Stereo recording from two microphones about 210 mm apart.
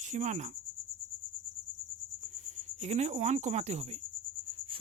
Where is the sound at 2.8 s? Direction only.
30° right (ahead or behind).